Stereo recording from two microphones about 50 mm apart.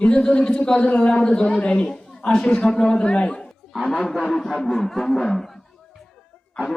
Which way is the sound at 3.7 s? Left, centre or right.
Centre.